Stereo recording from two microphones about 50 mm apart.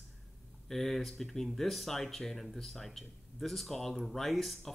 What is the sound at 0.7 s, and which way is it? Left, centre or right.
Speech, centre.